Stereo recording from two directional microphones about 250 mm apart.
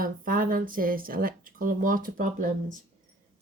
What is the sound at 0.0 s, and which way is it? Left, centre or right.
A woman's voice, right.